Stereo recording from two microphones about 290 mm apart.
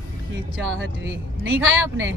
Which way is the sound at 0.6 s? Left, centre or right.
Right.